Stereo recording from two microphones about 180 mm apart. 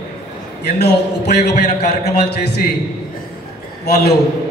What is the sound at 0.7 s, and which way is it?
Speech, 65° left (ahead or behind).